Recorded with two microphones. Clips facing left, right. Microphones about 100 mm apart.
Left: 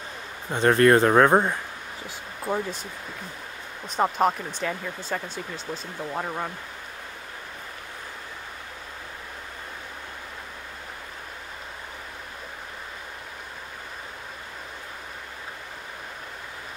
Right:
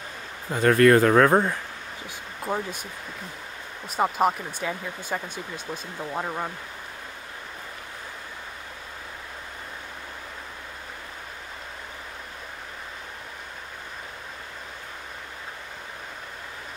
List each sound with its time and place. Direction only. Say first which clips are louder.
0.5 s speech: right 1 dB; 25° left (ahead or behind)
2.0 s speech: left 1 dB; 10° right (ahead or behind)
3.9 s speech: even; 5° right (ahead or behind)